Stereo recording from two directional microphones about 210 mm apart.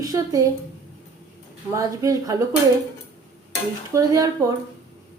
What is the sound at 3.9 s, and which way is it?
Speech, 15° right (ahead or behind).